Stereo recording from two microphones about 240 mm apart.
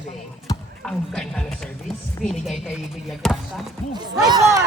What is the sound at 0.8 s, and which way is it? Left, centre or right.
Speech, centre.